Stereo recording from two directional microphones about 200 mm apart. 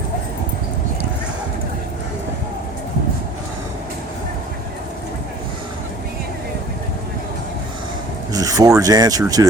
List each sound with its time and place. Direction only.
8.3 s rub: 15° right (ahead or behind)